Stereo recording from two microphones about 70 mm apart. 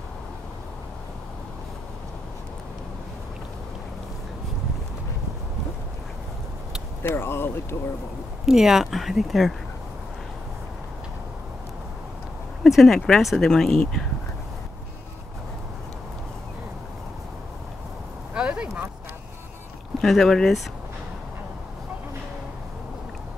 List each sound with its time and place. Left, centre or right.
7.0 s speech: left
8.5 s speech: centre
12.6 s speech: centre
18.3 s a sound: centre
20.0 s speech: centre